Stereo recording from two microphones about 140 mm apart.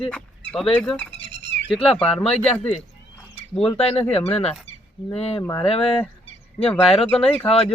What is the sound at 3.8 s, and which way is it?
Speech, 45° left (ahead or behind).